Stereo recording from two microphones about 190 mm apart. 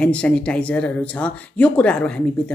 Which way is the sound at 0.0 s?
5° left (ahead or behind).